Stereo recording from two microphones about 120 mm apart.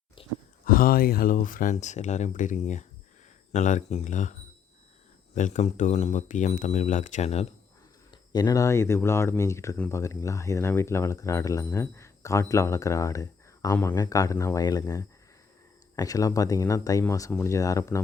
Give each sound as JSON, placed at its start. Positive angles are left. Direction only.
{"t": 0.2, "sound": "a sound", "side_deg": 45}
{"t": 1.4, "sound": "speech", "side_deg": 85}
{"t": 8.1, "sound": "speech", "side_deg": 35}